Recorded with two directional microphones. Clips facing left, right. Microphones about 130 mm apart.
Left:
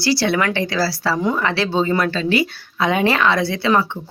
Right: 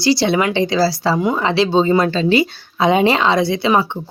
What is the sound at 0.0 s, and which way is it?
Speech, 20° right (ahead or behind).